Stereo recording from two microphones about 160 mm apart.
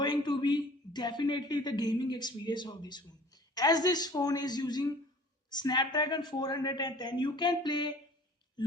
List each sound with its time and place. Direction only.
0.0 s a man's voice: 25° left (ahead or behind)